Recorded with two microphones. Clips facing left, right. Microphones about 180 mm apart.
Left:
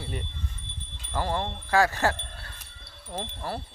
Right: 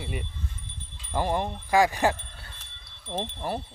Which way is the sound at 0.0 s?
10° right (ahead or behind).